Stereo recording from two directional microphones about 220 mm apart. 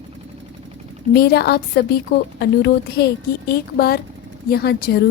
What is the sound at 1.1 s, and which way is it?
A woman's voice, 45° left (ahead or behind).